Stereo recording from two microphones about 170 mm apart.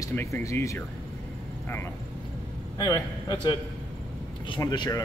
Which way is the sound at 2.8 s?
20° left (ahead or behind).